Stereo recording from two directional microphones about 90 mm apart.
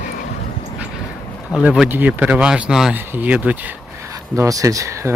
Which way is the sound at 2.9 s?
20° right (ahead or behind).